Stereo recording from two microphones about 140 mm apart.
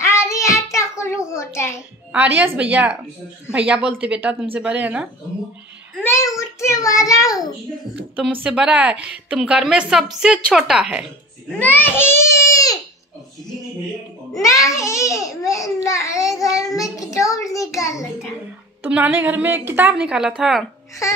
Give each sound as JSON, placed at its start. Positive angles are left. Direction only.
{"t": 0.0, "sound": "child singing", "side_deg": 20}
{"t": 2.1, "sound": "a woman's voice", "side_deg": -10}
{"t": 6.0, "sound": "a child's voice", "side_deg": 20}
{"t": 8.3, "sound": "a woman's voice", "side_deg": -10}
{"t": 11.6, "sound": "a child's voice", "side_deg": 15}
{"t": 14.4, "sound": "a child's voice", "side_deg": 25}
{"t": 18.8, "sound": "a woman's voice", "side_deg": -10}